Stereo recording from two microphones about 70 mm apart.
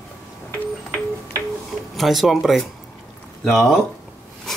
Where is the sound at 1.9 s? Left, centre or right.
Centre.